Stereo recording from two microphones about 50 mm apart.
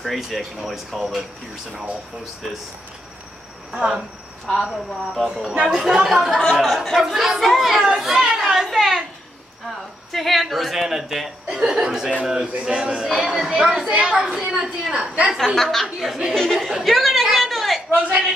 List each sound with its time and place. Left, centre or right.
0.0 s speech: centre
3.7 s speech: centre
4.6 s speech: centre
5.5 s speech: centre
6.3 s speech: centre
8.6 s a sound: centre
10.1 s a woman's voice: centre; by 15.3 s right
15.3 s speech: centre
16.3 s chatter: centre